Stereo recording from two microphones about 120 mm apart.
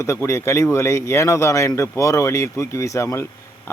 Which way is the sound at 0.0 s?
25° left (ahead or behind).